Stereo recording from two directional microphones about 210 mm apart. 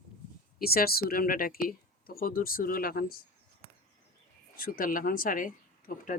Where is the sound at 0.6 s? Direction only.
45° left (ahead or behind).